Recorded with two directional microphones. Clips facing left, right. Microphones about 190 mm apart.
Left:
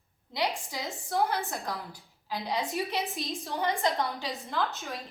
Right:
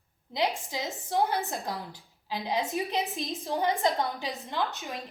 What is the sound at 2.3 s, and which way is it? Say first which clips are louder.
Speech: right 2 dB; 20° right (ahead or behind).